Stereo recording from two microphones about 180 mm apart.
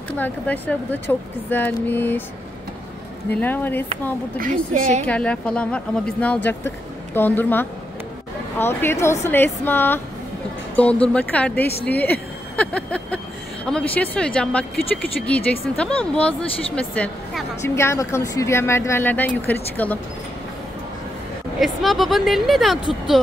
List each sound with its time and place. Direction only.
0.2 s speech: 10° left (ahead or behind)
3.3 s speech: 10° left (ahead or behind)
4.4 s a woman's voice: 45° right (ahead or behind)
5.0 s speech: 5° left (ahead or behind)
17.7 s speech: 15° left (ahead or behind)
21.5 s speech: centre (ahead or behind)